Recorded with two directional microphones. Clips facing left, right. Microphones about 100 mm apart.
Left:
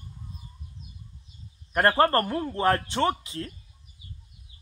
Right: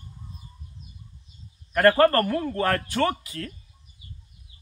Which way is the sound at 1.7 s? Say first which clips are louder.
Right 3 dB; 25° left (ahead or behind).